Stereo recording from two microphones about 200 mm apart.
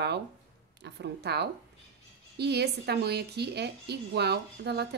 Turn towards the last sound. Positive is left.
turn(degrees=-55)  # may be behind; listen again after turning